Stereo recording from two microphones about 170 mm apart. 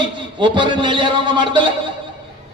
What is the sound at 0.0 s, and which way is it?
A man's voice, 25° right (ahead or behind).